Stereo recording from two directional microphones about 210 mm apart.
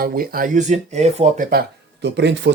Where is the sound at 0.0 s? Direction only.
45° right (ahead or behind).